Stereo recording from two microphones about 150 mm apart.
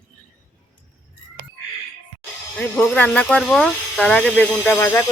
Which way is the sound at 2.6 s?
5° left (ahead or behind).